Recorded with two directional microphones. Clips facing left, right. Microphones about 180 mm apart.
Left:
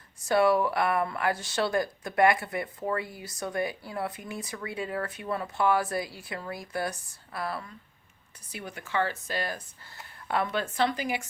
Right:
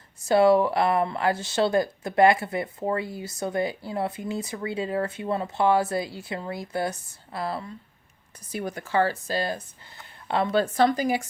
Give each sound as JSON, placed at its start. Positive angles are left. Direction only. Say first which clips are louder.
{"t": 0.3, "sound": "speech", "louder": "right 5 dB", "side_deg": -25}
{"t": 8.5, "sound": "speech", "louder": "right 6 dB", "side_deg": -40}